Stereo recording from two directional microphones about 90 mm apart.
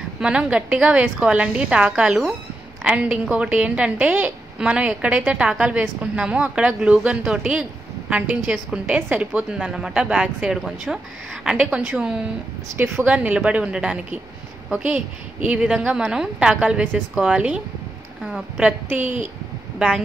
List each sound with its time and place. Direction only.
0.2 s a woman's voice: 10° right (ahead or behind)
18.6 s a woman's voice: 15° right (ahead or behind)